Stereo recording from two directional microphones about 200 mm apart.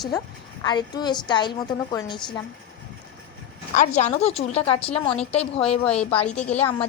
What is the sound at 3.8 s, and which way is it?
A woman's voice, 35° left (ahead or behind).